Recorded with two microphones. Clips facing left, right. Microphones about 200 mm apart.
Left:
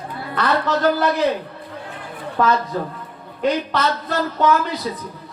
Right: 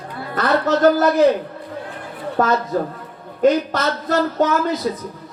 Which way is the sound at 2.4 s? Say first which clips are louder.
Right 1 dB; 45° right (ahead or behind).